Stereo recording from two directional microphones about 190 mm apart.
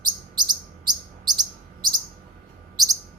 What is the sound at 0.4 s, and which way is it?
Chirp, 20° right (ahead or behind).